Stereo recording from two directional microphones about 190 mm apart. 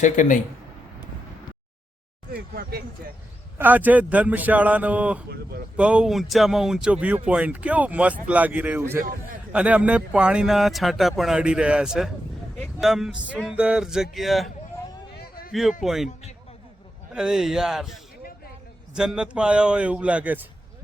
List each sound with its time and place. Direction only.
0.0 s speech: 40° left (ahead or behind)
2.3 s speech: 55° right (ahead or behind)
3.6 s speech: 10° right (ahead or behind)
5.3 s speech: 55° right (ahead or behind)
5.7 s speech: 5° right (ahead or behind)
15.2 s a sound: 50° left (ahead or behind)
15.8 s speech: centre (ahead or behind)
17.2 s speech: 5° right (ahead or behind)
18.9 s speech: 5° right (ahead or behind)